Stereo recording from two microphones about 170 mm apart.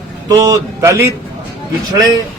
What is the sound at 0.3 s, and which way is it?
Speech, 20° right (ahead or behind).